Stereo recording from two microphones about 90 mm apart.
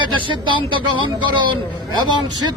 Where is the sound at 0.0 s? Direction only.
65° right (ahead or behind).